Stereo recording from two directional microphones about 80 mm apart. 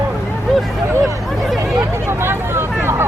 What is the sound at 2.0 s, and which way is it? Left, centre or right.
Vehicle, right.